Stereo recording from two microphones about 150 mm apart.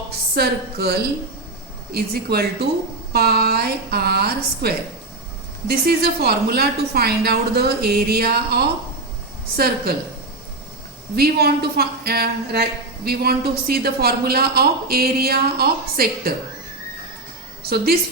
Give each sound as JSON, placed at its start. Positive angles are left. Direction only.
{"t": 0.3, "sound": "speech", "side_deg": -90}
{"t": 11.1, "sound": "speech", "side_deg": -90}